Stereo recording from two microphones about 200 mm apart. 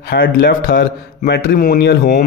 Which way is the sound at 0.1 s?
45° left (ahead or behind).